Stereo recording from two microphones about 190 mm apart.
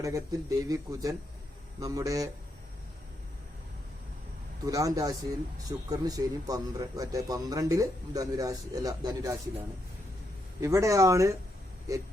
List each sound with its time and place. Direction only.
0.0 s speech: 15° right (ahead or behind)
4.6 s a man's voice: 20° right (ahead or behind)
10.6 s speech: 15° right (ahead or behind)